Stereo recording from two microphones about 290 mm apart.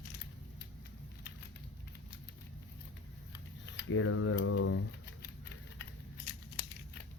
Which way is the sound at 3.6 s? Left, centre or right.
Left.